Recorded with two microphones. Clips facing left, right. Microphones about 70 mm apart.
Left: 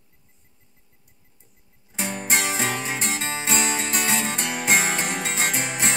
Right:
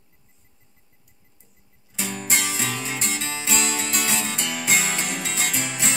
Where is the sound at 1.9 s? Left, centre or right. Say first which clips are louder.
Left 2 dB; left.